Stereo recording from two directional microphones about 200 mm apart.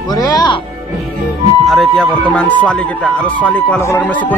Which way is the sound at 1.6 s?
Centre (ahead or behind).